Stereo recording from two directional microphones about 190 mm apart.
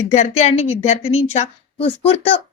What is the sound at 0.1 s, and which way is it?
A woman's voice, 35° left (ahead or behind).